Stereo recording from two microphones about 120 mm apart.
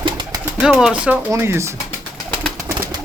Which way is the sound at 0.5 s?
5° right (ahead or behind).